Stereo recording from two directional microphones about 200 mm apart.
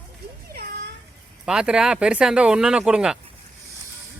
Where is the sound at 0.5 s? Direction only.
50° right (ahead or behind).